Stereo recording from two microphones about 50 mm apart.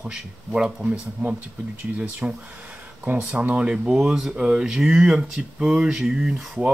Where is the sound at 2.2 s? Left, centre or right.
Right.